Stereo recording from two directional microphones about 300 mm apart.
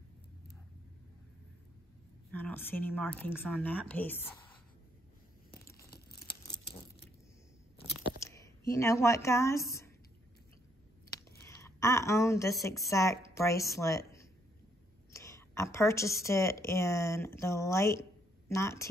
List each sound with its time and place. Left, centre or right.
2.3 s speech: centre
5.9 s tearing: left
8.2 s a woman's voice: centre
11.1 s a sound: centre
12.5 s speech: centre
12.9 s speech: centre